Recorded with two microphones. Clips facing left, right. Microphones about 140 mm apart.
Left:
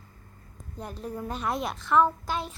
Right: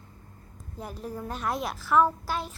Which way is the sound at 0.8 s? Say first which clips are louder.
Left 1 dB; 5° right (ahead or behind).